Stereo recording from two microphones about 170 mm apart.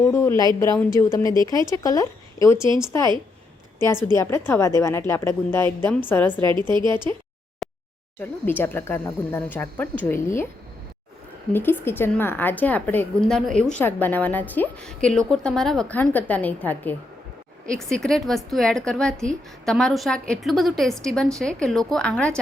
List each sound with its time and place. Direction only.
0.0 s speech: 15° left (ahead or behind)
3.8 s speech: 15° left (ahead or behind)
6.4 s a woman's voice: 30° right (ahead or behind)
7.6 s a sound: centre (ahead or behind)
8.2 s speech: 10° left (ahead or behind)
11.5 s a woman's voice: 10° left (ahead or behind)